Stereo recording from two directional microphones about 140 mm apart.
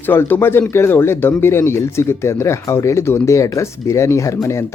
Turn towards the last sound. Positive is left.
turn(degrees=20)  # may be behind; listen again after turning